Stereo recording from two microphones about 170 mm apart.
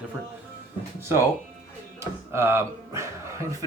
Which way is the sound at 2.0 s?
15° right (ahead or behind).